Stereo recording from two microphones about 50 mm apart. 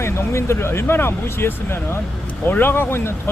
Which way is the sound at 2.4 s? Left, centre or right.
Left.